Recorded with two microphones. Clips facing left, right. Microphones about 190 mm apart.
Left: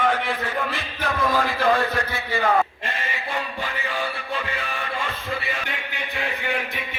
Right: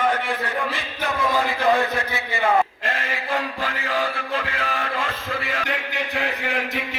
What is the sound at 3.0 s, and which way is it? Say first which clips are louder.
Music: right 2 dB; 90° right.